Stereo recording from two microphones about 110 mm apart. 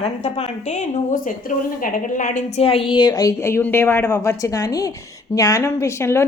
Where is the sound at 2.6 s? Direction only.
55° left (ahead or behind); by 6.2 s 25° left (ahead or behind).